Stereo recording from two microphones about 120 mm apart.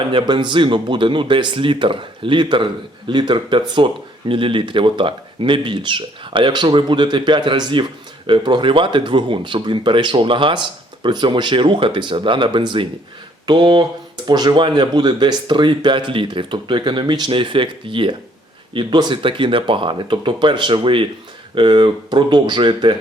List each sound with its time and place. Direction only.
0.1 s speech: 45° right (ahead or behind)